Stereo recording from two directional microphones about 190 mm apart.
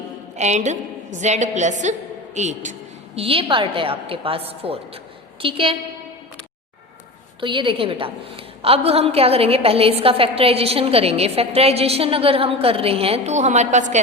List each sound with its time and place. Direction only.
0.3 s a woman's voice: 35° right (ahead or behind)
7.4 s a woman's voice: 25° right (ahead or behind)